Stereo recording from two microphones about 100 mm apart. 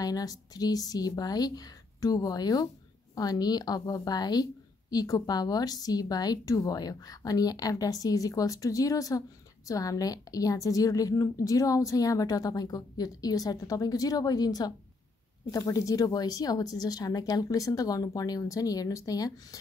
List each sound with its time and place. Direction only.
0.0 s a woman's voice: 40° left (ahead or behind)